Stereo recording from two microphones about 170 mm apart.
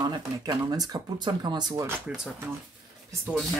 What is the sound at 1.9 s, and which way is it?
Speech, 10° right (ahead or behind).